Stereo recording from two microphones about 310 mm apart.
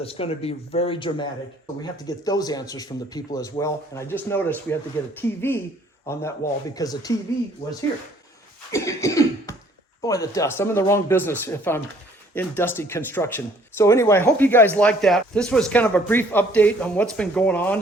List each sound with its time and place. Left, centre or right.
0.0 s speech: centre
8.7 s cough: centre
10.0 s speech: centre